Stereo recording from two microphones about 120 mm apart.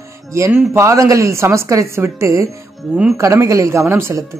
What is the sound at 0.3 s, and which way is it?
A woman's voice, 25° right (ahead or behind).